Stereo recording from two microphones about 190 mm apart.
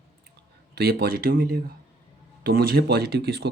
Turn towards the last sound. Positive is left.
turn(degrees=-60)  # may be behind; listen again after turning